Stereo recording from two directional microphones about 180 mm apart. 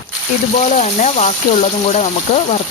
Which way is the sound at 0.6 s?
40° left (ahead or behind).